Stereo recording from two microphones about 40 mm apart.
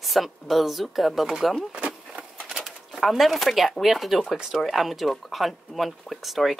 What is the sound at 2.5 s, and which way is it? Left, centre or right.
Bird, centre.